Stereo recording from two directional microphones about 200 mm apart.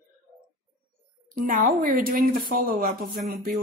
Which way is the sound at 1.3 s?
45° right (ahead or behind).